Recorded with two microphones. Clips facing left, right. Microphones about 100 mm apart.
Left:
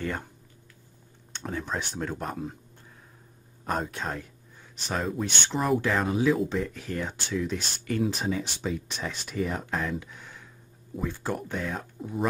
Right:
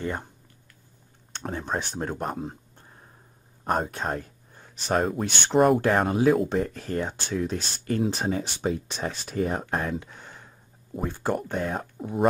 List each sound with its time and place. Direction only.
0.0 s speech: 25° right (ahead or behind)
1.3 s speech: 35° right (ahead or behind)
3.6 s speech: 50° right (ahead or behind)